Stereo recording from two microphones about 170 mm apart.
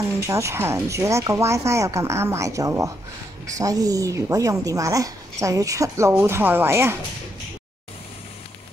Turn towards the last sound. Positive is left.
turn(degrees=-15)  # may be behind; listen again after turning